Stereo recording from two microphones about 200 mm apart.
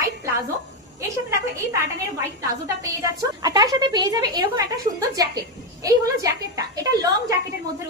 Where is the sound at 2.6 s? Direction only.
15° right (ahead or behind).